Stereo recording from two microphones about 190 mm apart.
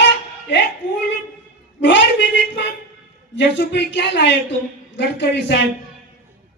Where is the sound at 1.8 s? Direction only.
70° left (ahead or behind).